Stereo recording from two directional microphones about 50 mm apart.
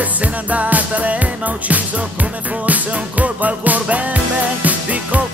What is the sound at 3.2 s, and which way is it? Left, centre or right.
Music, right.